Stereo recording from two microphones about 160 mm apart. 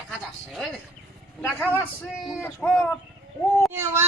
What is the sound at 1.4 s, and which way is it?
Speech, 10° left (ahead or behind).